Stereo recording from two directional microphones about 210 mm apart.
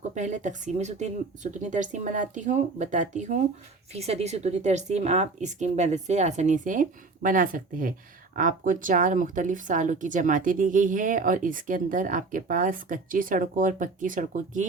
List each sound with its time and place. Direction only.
0.1 s speech: 35° right (ahead or behind)